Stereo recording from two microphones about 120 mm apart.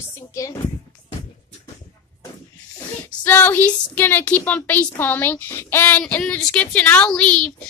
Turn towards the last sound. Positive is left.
turn(degrees=10)  # may be behind; listen again after turning